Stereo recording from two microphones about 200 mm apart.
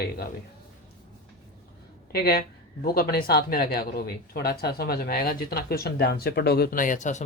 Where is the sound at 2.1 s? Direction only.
50° left (ahead or behind).